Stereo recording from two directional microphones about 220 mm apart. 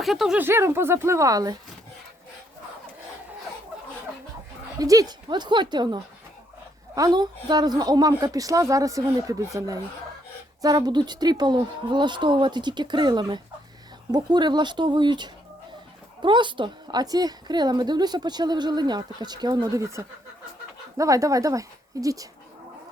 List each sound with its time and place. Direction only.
0.0 s a woman's voice: centre (ahead or behind)
4.8 s a woman's voice: 15° right (ahead or behind)